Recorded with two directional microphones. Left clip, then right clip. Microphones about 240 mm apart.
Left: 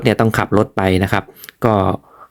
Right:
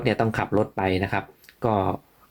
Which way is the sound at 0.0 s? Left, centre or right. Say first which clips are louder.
Left 8 dB; left.